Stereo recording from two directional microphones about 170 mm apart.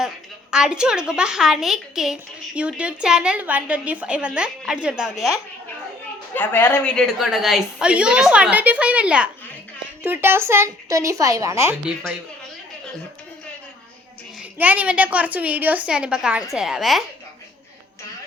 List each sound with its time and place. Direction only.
0.5 s a woman's voice: 5° right (ahead or behind)
6.3 s a woman's voice: 10° left (ahead or behind); by 11.8 s 15° right (ahead or behind)
14.6 s a woman's voice: 10° right (ahead or behind)